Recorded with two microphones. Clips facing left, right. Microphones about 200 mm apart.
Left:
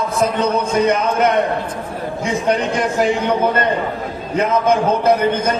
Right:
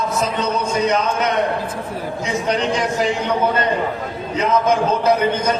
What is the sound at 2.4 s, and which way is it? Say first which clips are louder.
Speech: left 2 dB; 55° left (ahead or behind).